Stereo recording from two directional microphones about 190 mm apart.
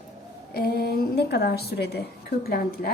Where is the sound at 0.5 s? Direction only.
50° left (ahead or behind).